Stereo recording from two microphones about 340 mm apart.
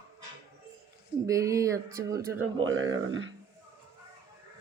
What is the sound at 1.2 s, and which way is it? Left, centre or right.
Speech, centre.